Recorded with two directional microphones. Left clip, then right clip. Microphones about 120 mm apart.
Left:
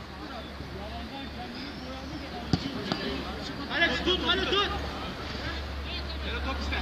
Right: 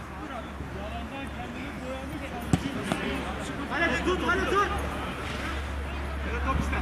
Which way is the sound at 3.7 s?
50° left (ahead or behind).